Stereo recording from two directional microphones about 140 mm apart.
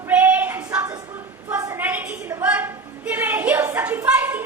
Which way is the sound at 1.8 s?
10° right (ahead or behind).